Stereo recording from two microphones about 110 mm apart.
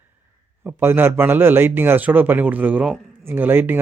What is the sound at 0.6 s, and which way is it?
A man's voice, 20° right (ahead or behind).